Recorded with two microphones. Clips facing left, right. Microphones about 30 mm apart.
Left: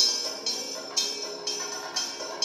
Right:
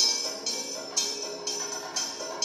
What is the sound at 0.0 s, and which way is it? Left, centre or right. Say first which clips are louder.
Music: left 1 dB; centre.